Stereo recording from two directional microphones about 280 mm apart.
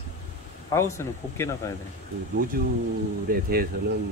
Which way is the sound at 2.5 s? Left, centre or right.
Right.